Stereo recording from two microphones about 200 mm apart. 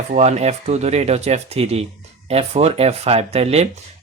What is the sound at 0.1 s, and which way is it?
Speech, 35° right (ahead or behind).